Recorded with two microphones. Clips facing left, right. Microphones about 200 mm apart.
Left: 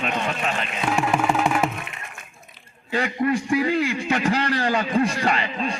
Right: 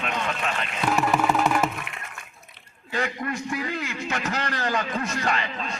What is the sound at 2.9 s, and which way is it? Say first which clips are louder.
A man's voice: left 6 dB; 15° left (ahead or behind).